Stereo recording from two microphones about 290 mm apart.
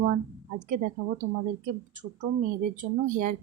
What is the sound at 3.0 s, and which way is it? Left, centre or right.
Speech, right.